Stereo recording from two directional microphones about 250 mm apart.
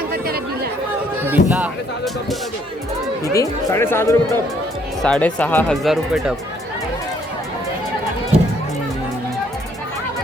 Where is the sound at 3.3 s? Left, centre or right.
Centre.